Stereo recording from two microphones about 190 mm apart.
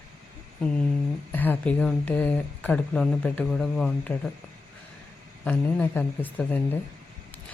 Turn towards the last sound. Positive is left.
turn(degrees=10)  # may be behind; listen again after turning